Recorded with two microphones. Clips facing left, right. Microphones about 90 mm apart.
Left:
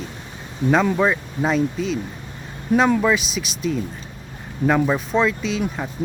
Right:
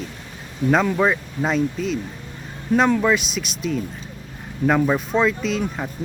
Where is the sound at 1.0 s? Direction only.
Centre (ahead or behind).